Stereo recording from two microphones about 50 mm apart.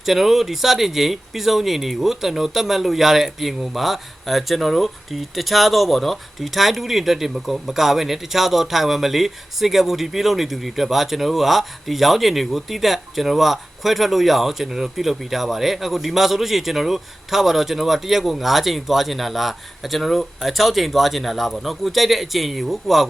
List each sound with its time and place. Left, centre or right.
0.0 s speech: centre